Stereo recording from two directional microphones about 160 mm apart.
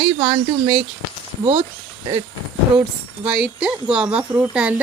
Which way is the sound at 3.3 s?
5° right (ahead or behind).